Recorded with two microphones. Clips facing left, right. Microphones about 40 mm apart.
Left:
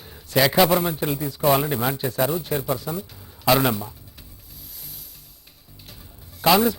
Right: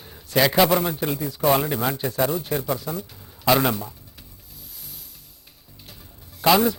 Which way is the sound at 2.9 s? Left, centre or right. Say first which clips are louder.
Left 1 dB; left.